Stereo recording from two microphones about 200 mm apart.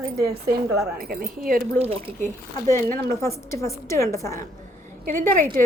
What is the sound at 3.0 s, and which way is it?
A woman's voice, 15° left (ahead or behind).